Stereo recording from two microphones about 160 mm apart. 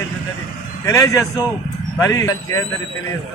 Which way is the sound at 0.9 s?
20° left (ahead or behind).